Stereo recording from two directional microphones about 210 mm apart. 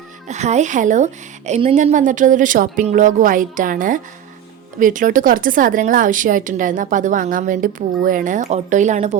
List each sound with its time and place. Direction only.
0.3 s speech: 35° right (ahead or behind)